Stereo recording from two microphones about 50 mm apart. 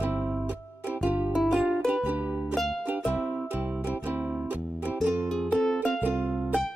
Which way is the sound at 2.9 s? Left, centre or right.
Right.